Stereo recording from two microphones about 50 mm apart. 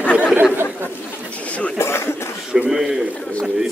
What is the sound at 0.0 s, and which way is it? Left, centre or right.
Chatter, left.